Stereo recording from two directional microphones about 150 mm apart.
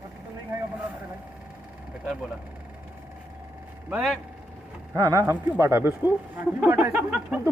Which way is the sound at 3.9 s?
5° right (ahead or behind).